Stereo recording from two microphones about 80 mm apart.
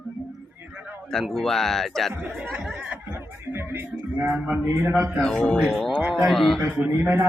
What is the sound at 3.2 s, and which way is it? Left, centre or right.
Music, right.